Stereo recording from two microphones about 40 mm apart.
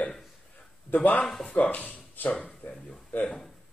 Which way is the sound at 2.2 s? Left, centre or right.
Left.